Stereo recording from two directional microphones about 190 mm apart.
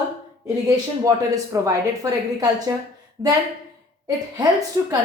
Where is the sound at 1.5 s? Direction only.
20° right (ahead or behind).